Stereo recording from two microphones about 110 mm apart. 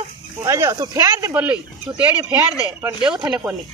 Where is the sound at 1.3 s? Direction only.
15° right (ahead or behind).